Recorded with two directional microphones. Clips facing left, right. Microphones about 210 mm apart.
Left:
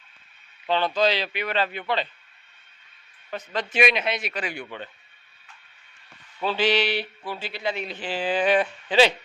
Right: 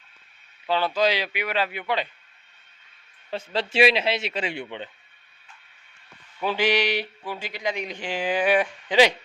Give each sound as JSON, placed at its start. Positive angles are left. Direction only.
{"t": 0.7, "sound": "speech", "side_deg": -5}
{"t": 3.2, "sound": "a man's voice", "side_deg": -25}
{"t": 6.4, "sound": "speech", "side_deg": -15}